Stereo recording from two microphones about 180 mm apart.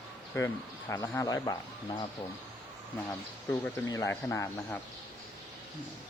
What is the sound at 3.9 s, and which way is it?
Speech, 15° left (ahead or behind).